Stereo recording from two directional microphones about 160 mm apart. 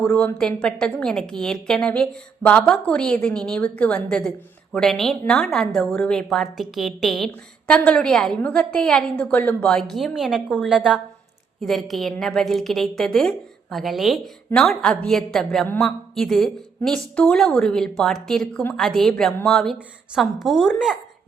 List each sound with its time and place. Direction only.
0.0 s a woman's voice: 5° left (ahead or behind)
16.1 s a woman's voice: centre (ahead or behind)